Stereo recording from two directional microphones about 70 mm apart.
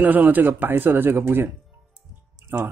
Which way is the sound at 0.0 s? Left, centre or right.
Right.